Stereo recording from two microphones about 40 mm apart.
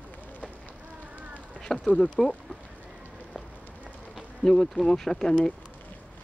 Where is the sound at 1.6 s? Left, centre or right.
Centre.